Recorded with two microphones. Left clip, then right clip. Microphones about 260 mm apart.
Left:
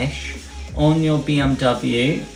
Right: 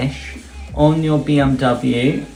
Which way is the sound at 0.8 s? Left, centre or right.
Centre.